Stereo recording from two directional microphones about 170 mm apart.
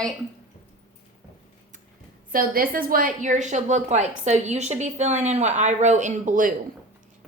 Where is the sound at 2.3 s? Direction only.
60° right (ahead or behind).